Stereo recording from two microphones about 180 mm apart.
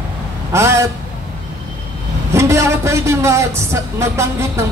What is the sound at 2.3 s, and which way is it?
Speech, 15° right (ahead or behind).